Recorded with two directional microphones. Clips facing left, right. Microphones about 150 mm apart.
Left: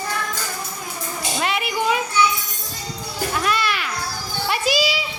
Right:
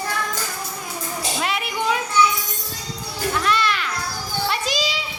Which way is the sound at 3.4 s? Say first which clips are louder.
Right 2 dB; 10° left (ahead or behind).